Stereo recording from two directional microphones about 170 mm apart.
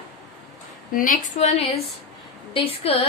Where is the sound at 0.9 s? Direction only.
50° left (ahead or behind).